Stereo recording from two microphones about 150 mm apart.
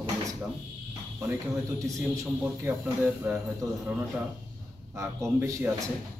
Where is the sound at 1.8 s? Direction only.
20° right (ahead or behind).